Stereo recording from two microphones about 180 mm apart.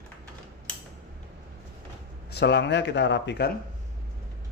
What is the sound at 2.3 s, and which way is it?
Speech, 70° left (ahead or behind).